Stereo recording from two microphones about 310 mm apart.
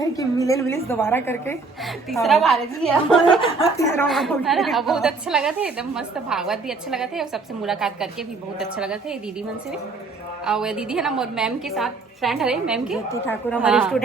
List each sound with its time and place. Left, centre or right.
0.2 s a woman's voice: centre
10.4 s a woman's voice: centre
13.6 s a woman's voice: centre